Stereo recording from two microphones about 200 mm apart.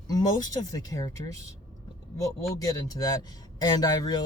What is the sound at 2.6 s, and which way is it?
Speech, 15° left (ahead or behind).